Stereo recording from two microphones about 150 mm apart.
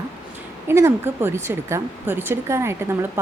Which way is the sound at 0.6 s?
15° right (ahead or behind).